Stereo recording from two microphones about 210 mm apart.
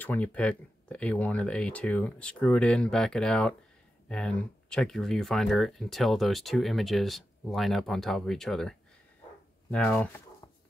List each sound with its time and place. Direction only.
0.0 s speech: 5° left (ahead or behind)